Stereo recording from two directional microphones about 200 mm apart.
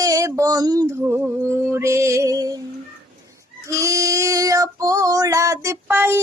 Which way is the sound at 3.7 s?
15° right (ahead or behind).